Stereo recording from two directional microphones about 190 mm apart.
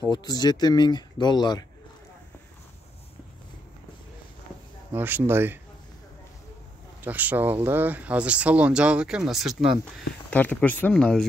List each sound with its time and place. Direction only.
0.2 s speech: 20° left (ahead or behind)
4.9 s speech: 10° right (ahead or behind)
7.1 s speech: 10° right (ahead or behind)